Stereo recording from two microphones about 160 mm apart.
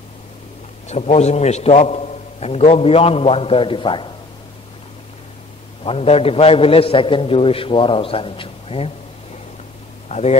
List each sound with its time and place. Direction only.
0.8 s a man's voice: 45° left (ahead or behind)
5.9 s a man's voice: 40° left (ahead or behind)
10.0 s speech: 45° left (ahead or behind)